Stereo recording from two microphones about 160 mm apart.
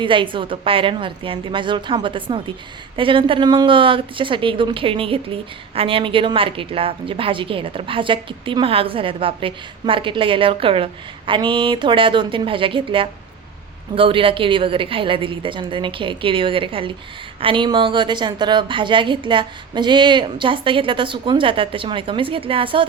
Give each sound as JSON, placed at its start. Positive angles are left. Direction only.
{"t": 0.0, "sound": "speech", "side_deg": -30}